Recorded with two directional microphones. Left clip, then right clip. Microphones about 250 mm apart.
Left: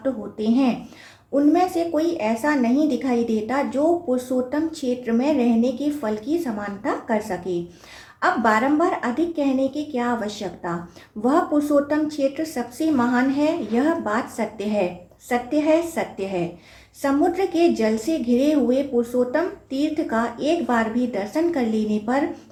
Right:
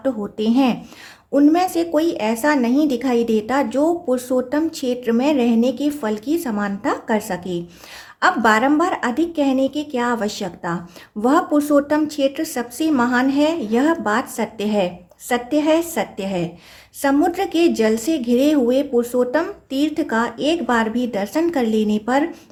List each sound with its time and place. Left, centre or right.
0.0 s speech: right